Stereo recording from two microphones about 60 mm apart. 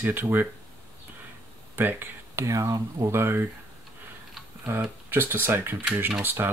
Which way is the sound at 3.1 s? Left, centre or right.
Right.